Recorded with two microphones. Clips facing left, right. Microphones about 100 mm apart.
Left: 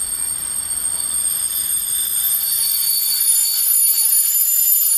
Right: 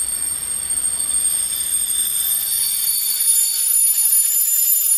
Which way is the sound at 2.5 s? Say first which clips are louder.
Left 2 dB; 55° left (ahead or behind).